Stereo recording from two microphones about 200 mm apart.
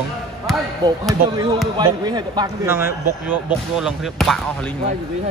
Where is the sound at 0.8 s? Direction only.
20° right (ahead or behind); by 4.4 s centre (ahead or behind).